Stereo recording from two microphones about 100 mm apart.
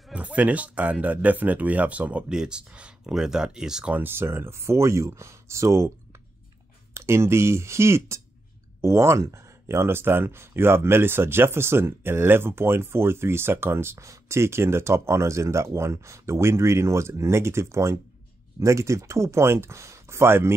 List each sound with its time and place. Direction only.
0.1 s speech: 15° right (ahead or behind)
3.9 s speech: 20° right (ahead or behind)
6.9 s speech: 25° right (ahead or behind)